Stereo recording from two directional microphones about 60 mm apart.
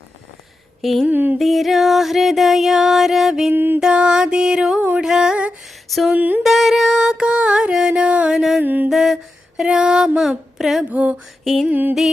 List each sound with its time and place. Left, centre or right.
0.8 s a sound: centre
1.0 s music: right
1.4 s music: centre
3.5 s music: right
3.8 s a sound: centre
6.1 s music: right
6.4 s music: centre
8.4 s music: centre
8.6 s music: right
8.9 s a sound: centre
10.8 s music: right